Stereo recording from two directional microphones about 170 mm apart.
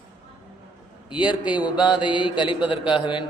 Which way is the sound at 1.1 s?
30° left (ahead or behind).